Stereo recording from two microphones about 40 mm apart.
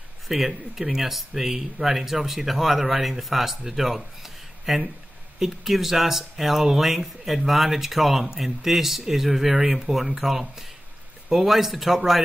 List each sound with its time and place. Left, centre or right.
0.3 s speech: centre